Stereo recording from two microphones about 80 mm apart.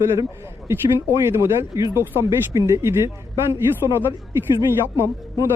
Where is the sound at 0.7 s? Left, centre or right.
Right.